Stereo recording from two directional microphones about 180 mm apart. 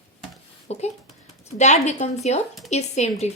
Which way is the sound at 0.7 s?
35° left (ahead or behind).